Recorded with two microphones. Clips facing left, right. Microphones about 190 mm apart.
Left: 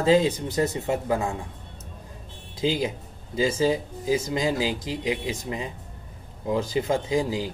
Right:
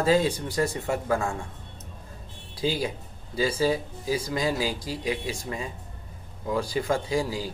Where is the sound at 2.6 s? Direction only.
20° left (ahead or behind).